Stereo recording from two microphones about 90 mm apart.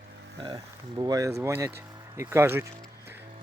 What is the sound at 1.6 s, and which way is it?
Vehicle, 35° right (ahead or behind).